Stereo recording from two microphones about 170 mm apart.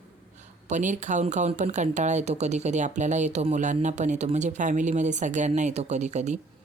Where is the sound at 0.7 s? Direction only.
45° right (ahead or behind).